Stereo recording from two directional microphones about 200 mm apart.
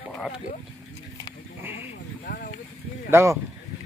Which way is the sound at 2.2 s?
45° left (ahead or behind).